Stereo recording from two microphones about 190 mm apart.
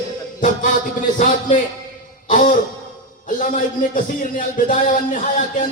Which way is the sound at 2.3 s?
45° left (ahead or behind).